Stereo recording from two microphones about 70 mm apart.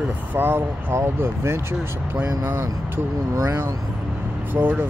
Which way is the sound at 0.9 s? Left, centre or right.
Right.